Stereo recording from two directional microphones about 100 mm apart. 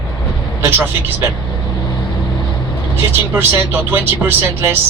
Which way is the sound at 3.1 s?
20° right (ahead or behind).